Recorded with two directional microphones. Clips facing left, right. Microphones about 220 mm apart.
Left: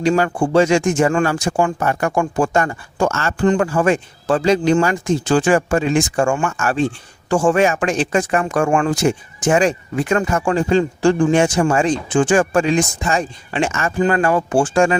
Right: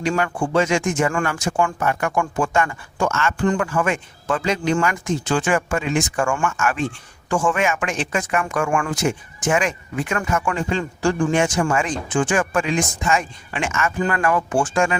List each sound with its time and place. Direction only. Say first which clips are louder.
0.2 s speech: left 5 dB; 30° left (ahead or behind)